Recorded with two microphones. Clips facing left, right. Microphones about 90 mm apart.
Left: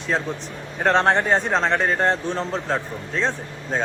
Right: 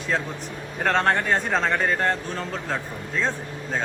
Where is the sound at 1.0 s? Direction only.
25° left (ahead or behind).